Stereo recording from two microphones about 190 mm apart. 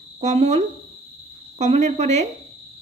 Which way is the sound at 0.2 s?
35° right (ahead or behind).